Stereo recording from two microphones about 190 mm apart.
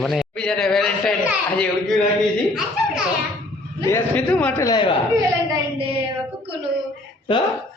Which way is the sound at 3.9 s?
5° left (ahead or behind).